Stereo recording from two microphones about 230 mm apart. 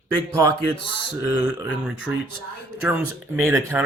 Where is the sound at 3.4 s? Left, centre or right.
Centre.